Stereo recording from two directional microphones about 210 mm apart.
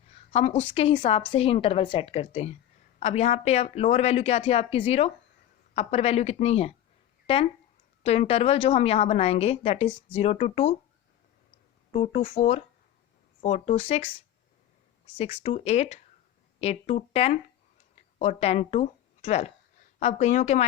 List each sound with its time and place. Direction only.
0.3 s a woman's voice: 30° left (ahead or behind)
8.0 s a woman's voice: 30° left (ahead or behind)
11.9 s a woman's voice: 30° left (ahead or behind)
15.2 s a woman's voice: 30° left (ahead or behind)